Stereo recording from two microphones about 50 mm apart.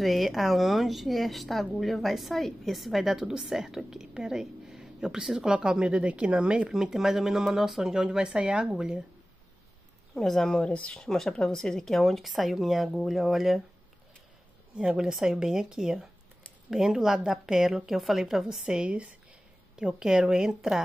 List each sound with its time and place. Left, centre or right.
0.0 s a woman's voice: centre; by 6.7 s right
6.7 s speech: centre
10.1 s a woman's voice: centre
10.6 s speech: left
11.0 s a woman's voice: centre
14.8 s a woman's voice: centre
18.8 s speech: centre